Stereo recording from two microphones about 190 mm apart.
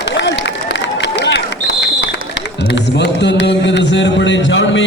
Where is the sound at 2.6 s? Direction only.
65° left (ahead or behind).